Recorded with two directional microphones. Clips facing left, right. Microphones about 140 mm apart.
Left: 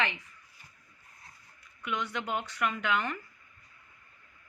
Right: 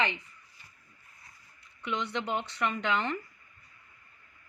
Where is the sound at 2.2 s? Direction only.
5° left (ahead or behind).